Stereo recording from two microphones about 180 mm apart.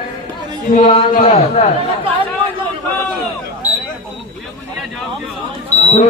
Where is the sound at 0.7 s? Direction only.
35° left (ahead or behind).